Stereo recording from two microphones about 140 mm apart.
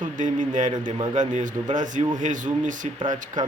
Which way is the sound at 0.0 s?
65° right (ahead or behind).